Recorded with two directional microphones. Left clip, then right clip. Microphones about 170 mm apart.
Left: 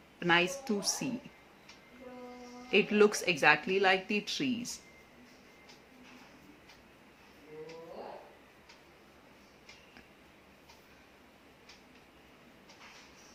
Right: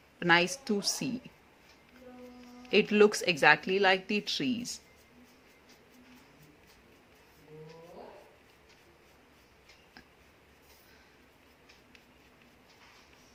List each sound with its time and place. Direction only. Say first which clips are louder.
0.2 s a woman's voice: right 3 dB; 20° right (ahead or behind)
2.6 s speech: right 2 dB; 20° right (ahead or behind)